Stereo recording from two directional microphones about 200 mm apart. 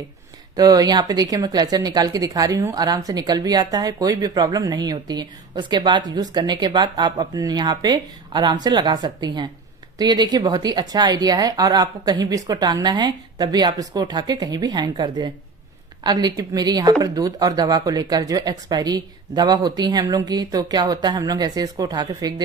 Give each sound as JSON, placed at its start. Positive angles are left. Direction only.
{"t": 0.6, "sound": "a woman's voice", "side_deg": -20}